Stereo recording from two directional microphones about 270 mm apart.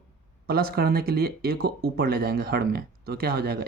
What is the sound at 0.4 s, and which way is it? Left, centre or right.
Speech, right.